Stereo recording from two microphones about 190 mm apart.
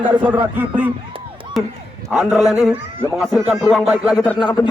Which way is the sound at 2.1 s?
5° right (ahead or behind).